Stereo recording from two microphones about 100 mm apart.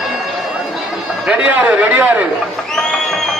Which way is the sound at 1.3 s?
15° right (ahead or behind).